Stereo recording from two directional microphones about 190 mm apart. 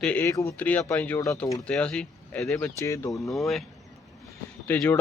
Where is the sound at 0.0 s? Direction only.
10° left (ahead or behind).